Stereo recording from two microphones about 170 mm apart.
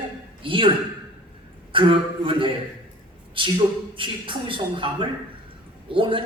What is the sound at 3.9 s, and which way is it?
Speech, 30° right (ahead or behind).